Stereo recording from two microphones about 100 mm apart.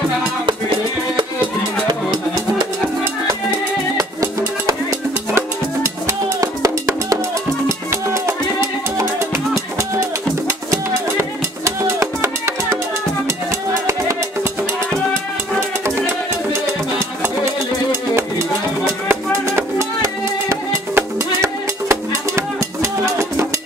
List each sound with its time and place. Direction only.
3.9 s music: 35° right (ahead or behind)
11.1 s music: 30° right (ahead or behind)
19.0 s music: 25° right (ahead or behind)